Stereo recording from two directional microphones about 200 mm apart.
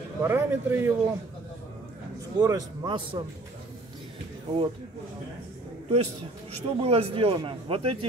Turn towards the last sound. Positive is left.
turn(degrees=-30)  # may be behind; listen again after turning